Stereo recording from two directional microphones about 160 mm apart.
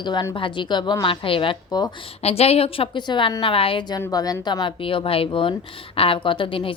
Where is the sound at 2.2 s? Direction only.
40° left (ahead or behind).